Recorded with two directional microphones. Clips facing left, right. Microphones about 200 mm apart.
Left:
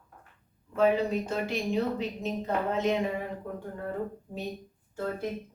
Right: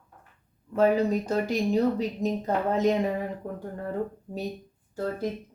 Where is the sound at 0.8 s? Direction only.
40° right (ahead or behind).